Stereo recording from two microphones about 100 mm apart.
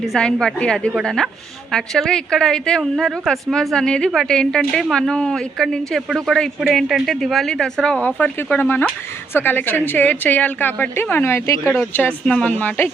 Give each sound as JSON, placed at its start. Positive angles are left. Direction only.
{"t": 0.2, "sound": "a woman's voice", "side_deg": 5}
{"t": 11.8, "sound": "speech", "side_deg": 15}